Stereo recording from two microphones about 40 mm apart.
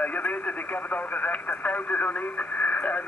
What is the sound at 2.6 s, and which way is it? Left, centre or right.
Radio, left.